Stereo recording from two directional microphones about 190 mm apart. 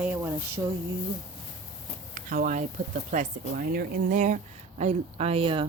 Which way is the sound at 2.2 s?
45° right (ahead or behind).